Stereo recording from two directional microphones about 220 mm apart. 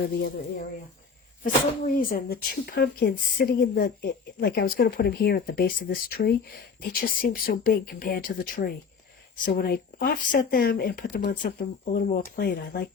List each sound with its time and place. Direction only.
1.5 s speech: 35° left (ahead or behind)